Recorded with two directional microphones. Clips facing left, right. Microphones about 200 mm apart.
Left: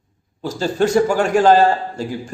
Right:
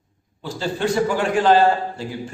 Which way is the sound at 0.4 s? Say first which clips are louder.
Left 5 dB; 45° left (ahead or behind).